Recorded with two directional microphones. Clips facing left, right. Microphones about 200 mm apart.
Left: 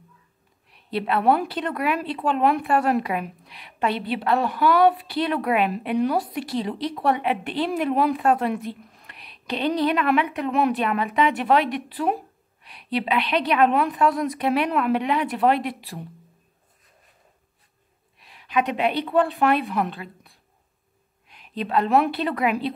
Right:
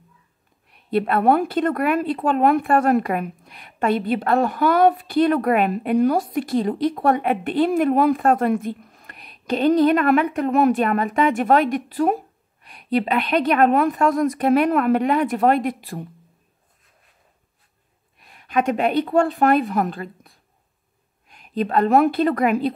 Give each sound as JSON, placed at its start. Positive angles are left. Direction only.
{"t": 0.8, "sound": "a woman's voice", "side_deg": -50}
{"t": 18.2, "sound": "a woman's voice", "side_deg": -50}
{"t": 21.3, "sound": "a sound", "side_deg": -45}
{"t": 22.1, "sound": "a woman's voice", "side_deg": -45}